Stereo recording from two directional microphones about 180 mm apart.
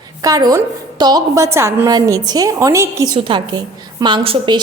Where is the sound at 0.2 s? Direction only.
20° right (ahead or behind).